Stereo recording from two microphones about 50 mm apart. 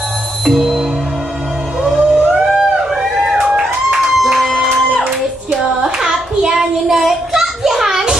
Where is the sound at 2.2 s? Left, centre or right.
Centre.